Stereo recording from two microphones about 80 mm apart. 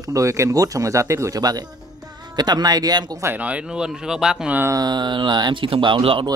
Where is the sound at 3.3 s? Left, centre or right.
Centre.